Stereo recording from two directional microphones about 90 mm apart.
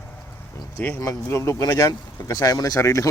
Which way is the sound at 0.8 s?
20° left (ahead or behind).